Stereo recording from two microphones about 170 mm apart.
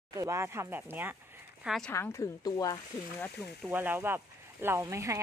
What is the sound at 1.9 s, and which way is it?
Speech, 15° left (ahead or behind).